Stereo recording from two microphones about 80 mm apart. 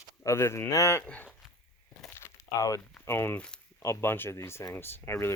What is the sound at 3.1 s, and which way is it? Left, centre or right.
Speech, left.